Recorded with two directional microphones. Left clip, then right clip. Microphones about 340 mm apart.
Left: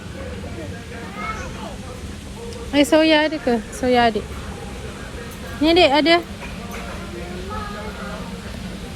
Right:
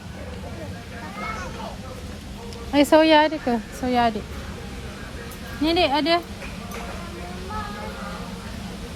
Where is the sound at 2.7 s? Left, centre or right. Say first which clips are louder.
Left 1 dB; right.